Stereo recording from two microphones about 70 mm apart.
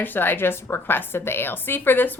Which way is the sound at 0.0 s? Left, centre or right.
Left.